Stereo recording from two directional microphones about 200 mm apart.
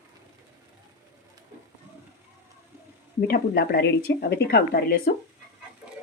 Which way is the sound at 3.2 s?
50° left (ahead or behind).